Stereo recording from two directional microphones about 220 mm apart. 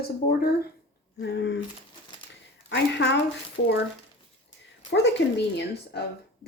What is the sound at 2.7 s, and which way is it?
Speech, 50° left (ahead or behind).